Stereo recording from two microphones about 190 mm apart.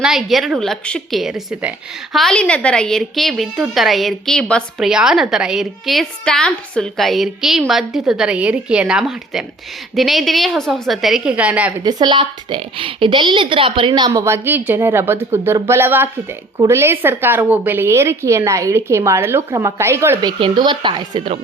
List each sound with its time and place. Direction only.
0.0 s a woman's voice: centre (ahead or behind)
11.8 s a woman's voice: 20° right (ahead or behind)
20.4 s a woman's voice: 25° right (ahead or behind)